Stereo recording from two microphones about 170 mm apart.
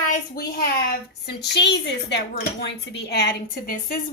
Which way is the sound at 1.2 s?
80° left.